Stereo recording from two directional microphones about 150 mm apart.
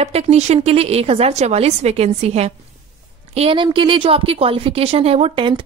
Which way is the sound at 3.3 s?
35° right (ahead or behind).